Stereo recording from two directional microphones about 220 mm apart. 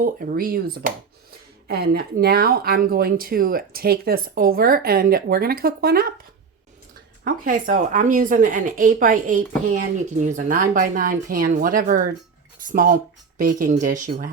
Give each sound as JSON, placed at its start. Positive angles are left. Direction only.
{"t": 0.0, "sound": "speech", "side_deg": -35}
{"t": 7.3, "sound": "speech", "side_deg": -35}